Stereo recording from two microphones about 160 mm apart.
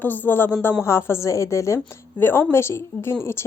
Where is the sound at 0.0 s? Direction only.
10° left (ahead or behind).